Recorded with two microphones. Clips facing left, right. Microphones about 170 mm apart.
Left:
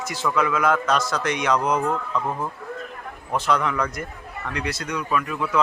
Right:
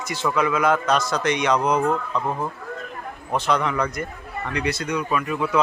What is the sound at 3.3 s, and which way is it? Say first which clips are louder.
Speech: right 1 dB; centre (ahead or behind).